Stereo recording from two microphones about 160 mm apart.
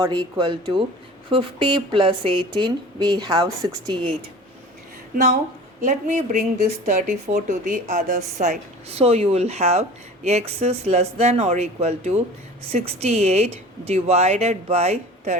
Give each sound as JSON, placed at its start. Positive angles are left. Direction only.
{"t": 0.0, "sound": "speech", "side_deg": -25}
{"t": 5.8, "sound": "a woman's voice", "side_deg": -50}